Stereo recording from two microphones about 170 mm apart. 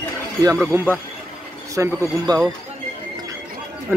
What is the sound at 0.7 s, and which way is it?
Speech, 15° right (ahead or behind).